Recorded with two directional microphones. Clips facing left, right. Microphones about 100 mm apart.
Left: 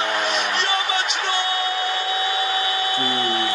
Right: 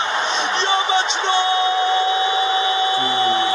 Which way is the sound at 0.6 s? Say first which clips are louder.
Right 5 dB; 25° right (ahead or behind).